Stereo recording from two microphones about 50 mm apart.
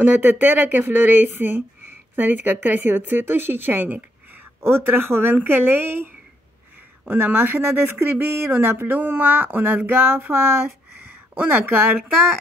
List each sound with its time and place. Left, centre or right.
0.0 s speech: right
4.6 s speech: right
7.1 s speech: right